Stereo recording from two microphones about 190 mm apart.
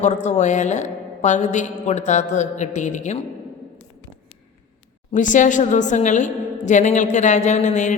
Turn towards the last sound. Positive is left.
turn(degrees=40)  # may be behind; listen again after turning